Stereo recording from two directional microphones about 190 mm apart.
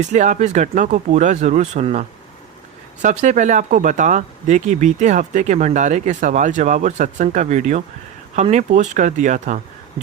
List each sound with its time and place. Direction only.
0.0 s speech: 40° right (ahead or behind)